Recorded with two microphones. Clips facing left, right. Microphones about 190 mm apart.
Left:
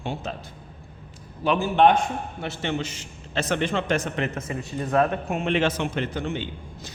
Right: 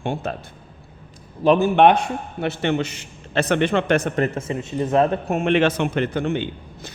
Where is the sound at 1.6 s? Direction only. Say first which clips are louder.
Even; 70° right (ahead or behind).